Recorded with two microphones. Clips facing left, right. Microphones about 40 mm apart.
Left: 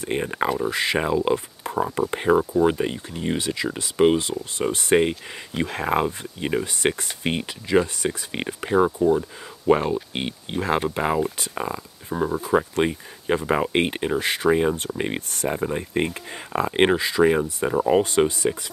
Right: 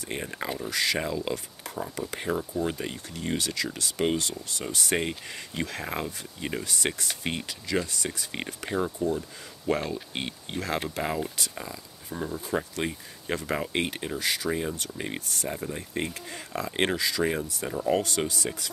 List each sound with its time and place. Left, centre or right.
0.0 s speech: left